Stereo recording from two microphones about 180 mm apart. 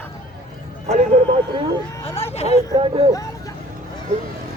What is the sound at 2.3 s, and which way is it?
Speech, 35° left (ahead or behind).